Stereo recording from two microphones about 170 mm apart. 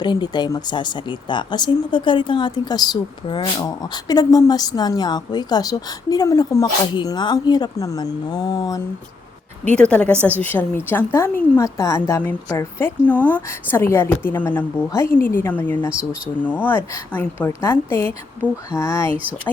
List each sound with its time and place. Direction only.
0.0 s speech: 25° left (ahead or behind)
9.6 s a woman's voice: 5° left (ahead or behind)
15.9 s speech: 5° right (ahead or behind)
16.4 s a woman's voice: 10° left (ahead or behind)